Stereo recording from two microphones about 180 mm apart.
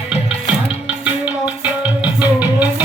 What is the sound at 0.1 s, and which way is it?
Music, 5° right (ahead or behind).